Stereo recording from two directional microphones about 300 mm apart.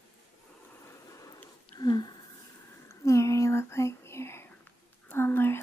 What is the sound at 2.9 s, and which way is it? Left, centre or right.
Whispering, centre.